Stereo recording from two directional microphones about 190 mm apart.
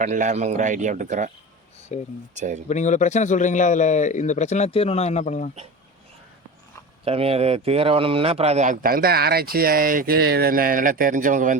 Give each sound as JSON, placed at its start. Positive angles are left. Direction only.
{"t": 0.0, "sound": "speech", "side_deg": -40}
{"t": 1.9, "sound": "a man's voice", "side_deg": 35}
{"t": 2.3, "sound": "speech", "side_deg": -40}
{"t": 2.6, "sound": "a man's voice", "side_deg": 40}
{"t": 7.0, "sound": "speech", "side_deg": -30}